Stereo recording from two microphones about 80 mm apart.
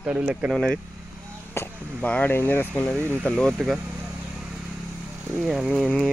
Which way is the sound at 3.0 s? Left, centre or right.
Right.